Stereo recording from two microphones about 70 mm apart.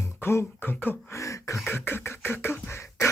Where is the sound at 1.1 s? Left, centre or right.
Left.